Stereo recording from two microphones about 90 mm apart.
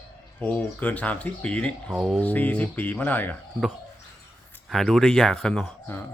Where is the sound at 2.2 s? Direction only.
20° left (ahead or behind).